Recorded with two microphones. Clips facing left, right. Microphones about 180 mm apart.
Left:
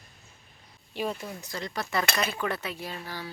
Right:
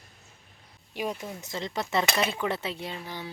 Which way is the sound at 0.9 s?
10° right (ahead or behind).